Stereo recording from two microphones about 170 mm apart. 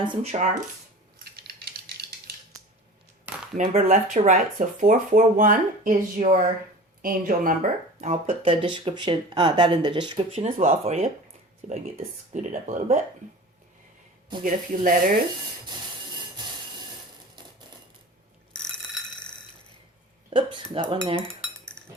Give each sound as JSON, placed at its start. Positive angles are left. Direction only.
{"t": 0.1, "sound": "speech", "side_deg": -40}
{"t": 1.2, "sound": "a sound", "side_deg": -70}
{"t": 3.3, "sound": "a sound", "side_deg": -10}
{"t": 3.6, "sound": "speech", "side_deg": -45}
{"t": 8.0, "sound": "speech", "side_deg": -35}
{"t": 10.4, "sound": "speech", "side_deg": -40}
{"t": 14.4, "sound": "speech", "side_deg": -55}
{"t": 20.3, "sound": "speech", "side_deg": -30}